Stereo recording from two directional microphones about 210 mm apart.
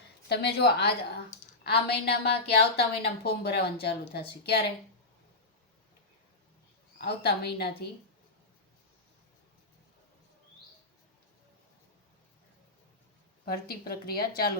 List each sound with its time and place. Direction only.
0.3 s speech: 50° left (ahead or behind)
7.0 s speech: 50° left (ahead or behind)
13.4 s speech: 45° left (ahead or behind)